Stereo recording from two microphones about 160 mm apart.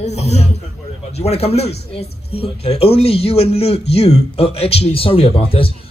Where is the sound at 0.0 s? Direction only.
45° left (ahead or behind).